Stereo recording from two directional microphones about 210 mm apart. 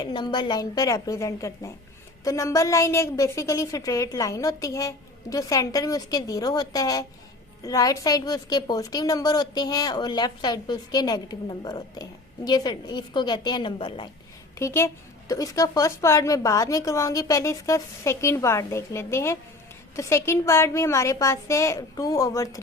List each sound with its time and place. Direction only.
0.0 s a woman's voice: 20° left (ahead or behind)
14.6 s a woman's voice: 15° left (ahead or behind)